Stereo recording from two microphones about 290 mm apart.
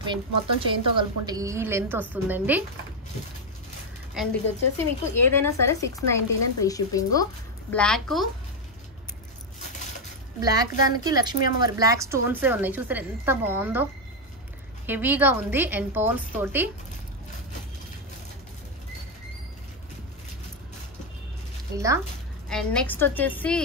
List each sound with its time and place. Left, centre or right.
0.0 s a woman's voice: centre
4.1 s a woman's voice: centre
10.4 s a woman's voice: centre
14.9 s a woman's voice: centre
21.7 s a woman's voice: centre
22.5 s a woman's voice: centre